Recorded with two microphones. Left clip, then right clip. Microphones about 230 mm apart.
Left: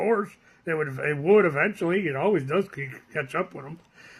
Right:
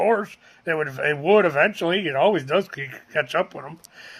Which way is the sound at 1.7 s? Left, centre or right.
Right.